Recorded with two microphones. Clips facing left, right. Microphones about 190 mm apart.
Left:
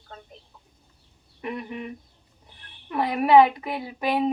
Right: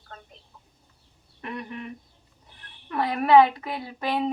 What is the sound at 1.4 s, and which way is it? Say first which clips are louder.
Speech: left 3 dB; 10° left (ahead or behind).